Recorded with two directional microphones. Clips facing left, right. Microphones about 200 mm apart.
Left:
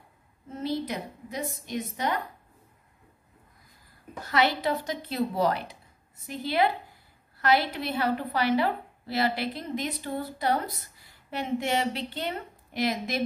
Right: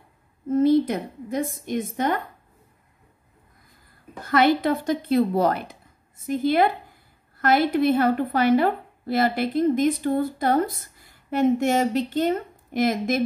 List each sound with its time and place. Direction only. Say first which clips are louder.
0.5 s a woman's voice: right 12 dB; 50° right (ahead or behind)
4.2 s a woman's voice: right 6 dB; 50° right (ahead or behind)